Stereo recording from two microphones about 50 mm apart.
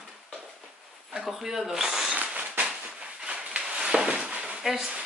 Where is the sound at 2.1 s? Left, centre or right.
Right.